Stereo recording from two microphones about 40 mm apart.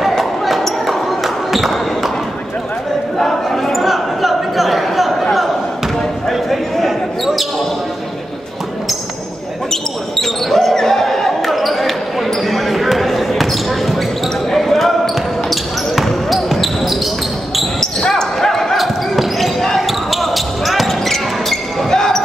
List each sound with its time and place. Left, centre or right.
0.0 s basketball bounce: centre
3.2 s a sound: centre
6.2 s a sound: centre
9.7 s basketball bounce: centre
17.7 s basketball bounce: centre
21.9 s basketball bounce: centre